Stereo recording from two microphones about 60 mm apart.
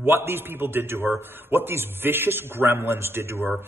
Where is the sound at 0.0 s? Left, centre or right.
Right.